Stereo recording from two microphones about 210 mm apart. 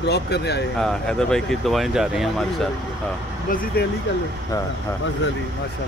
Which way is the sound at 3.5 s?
40° left (ahead or behind).